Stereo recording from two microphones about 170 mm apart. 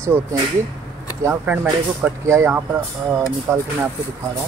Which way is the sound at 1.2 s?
10° right (ahead or behind).